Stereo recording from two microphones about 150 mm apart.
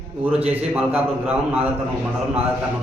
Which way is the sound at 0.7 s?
10° right (ahead or behind).